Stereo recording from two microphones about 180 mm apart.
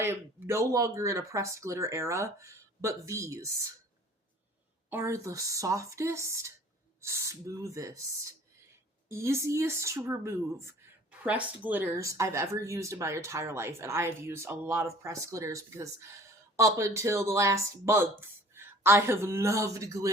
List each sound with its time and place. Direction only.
0.0 s speech: 10° right (ahead or behind)
4.9 s speech: 15° right (ahead or behind)